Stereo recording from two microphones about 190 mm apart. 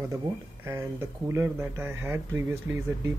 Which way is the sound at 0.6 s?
15° right (ahead or behind).